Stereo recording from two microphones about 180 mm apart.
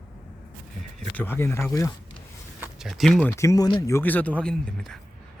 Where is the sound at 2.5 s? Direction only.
5° right (ahead or behind).